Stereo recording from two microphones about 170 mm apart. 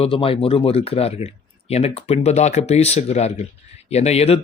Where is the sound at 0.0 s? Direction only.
30° left (ahead or behind).